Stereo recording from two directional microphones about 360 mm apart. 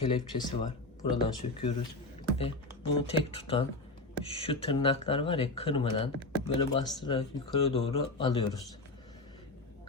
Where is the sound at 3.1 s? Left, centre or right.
Centre.